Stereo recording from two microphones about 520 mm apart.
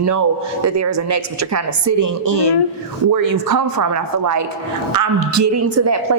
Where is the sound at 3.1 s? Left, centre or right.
Right.